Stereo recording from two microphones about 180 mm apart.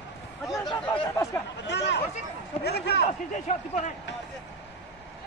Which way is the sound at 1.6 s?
75° left (ahead or behind).